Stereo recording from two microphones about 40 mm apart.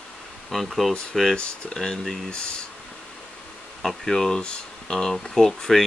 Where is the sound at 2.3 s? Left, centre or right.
Left.